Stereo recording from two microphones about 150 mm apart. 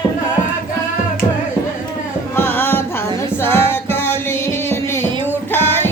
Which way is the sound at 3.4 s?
15° left (ahead or behind).